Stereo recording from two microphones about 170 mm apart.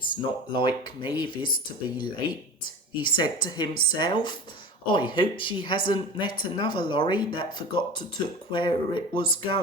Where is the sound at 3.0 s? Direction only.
25° left (ahead or behind).